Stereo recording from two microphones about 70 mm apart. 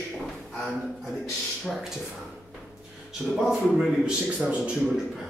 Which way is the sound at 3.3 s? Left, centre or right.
Centre.